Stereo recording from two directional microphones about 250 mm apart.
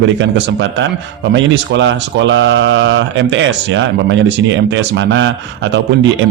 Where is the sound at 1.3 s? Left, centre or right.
Right.